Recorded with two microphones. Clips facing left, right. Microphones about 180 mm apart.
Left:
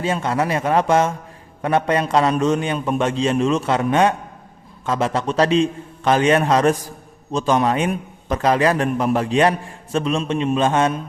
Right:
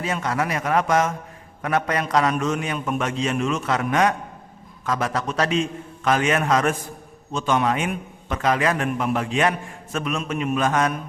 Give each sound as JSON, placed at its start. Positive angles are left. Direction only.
{"t": 0.0, "sound": "a man's voice", "side_deg": 30}